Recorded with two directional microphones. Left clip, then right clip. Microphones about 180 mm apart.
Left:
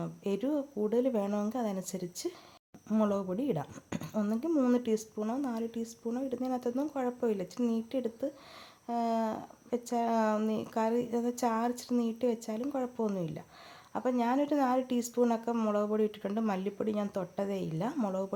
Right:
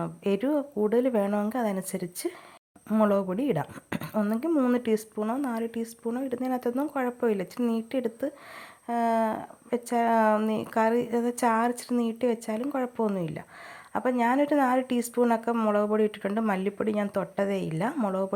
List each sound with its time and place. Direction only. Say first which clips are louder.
0.0 s speech: right 6 dB; 15° right (ahead or behind)